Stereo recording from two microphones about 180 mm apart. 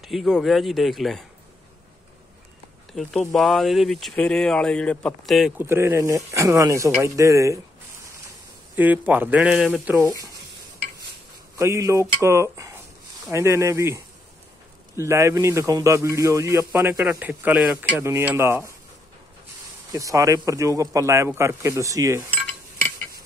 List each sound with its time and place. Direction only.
0.0 s speech: centre (ahead or behind)
2.9 s speech: 5° left (ahead or behind)
5.6 s a man's voice: 15° right (ahead or behind)
8.7 s a man's voice: 10° right (ahead or behind)
10.0 s speech: 20° right (ahead or behind)
11.5 s a man's voice: 15° right (ahead or behind)
19.9 s a man's voice: 20° right (ahead or behind)
22.3 s cutlery: 10° left (ahead or behind)